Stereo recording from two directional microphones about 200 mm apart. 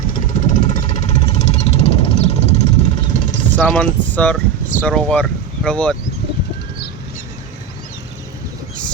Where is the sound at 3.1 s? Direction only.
40° left (ahead or behind).